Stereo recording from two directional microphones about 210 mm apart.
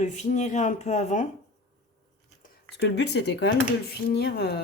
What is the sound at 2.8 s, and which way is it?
Speech, 55° left (ahead or behind).